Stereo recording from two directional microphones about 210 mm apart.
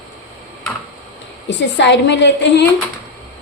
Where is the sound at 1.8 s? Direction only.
55° left (ahead or behind).